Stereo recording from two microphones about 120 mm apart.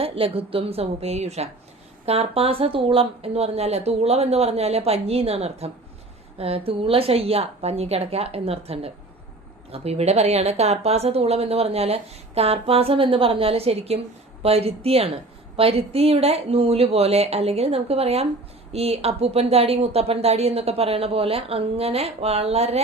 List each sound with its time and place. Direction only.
0.0 s speech: 50° right (ahead or behind)